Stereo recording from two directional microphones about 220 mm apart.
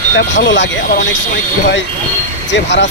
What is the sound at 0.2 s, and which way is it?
Speech, 55° left (ahead or behind).